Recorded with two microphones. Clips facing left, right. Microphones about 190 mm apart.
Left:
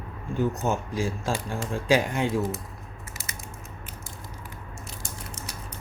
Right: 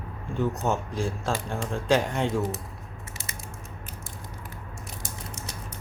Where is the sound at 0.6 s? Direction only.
10° left (ahead or behind).